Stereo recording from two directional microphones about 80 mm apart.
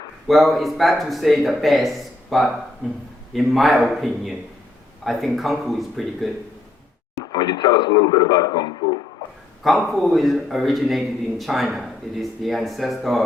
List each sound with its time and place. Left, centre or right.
0.3 s a man's voice: centre
7.3 s a man's voice: left
9.6 s a man's voice: centre